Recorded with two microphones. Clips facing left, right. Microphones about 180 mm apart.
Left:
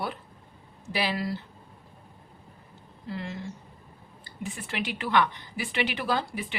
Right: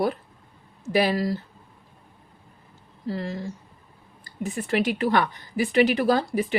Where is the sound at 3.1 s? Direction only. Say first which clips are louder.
Right 6 dB; 35° right (ahead or behind).